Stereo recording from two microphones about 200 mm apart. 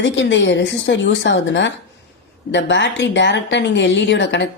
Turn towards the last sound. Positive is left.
turn(degrees=65)  # may be behind; listen again after turning